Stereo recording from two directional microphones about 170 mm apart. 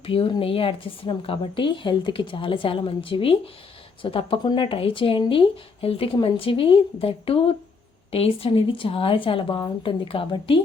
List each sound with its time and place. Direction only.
0.0 s speech: 30° left (ahead or behind)